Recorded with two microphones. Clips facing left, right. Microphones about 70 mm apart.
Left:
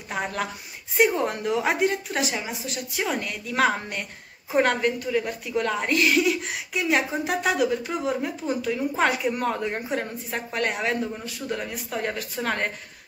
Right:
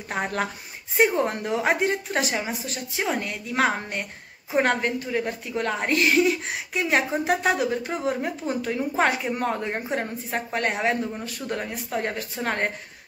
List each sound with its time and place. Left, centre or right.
0.1 s a woman's voice: right